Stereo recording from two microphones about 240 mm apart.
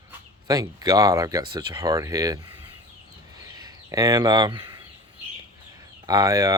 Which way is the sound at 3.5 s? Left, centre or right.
Centre.